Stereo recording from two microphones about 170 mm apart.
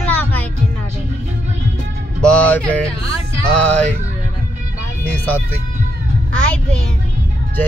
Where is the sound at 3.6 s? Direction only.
10° left (ahead or behind).